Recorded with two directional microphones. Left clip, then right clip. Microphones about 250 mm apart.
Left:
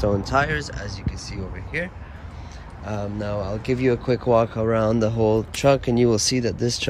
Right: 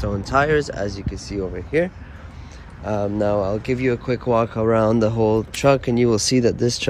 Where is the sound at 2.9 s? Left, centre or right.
Centre.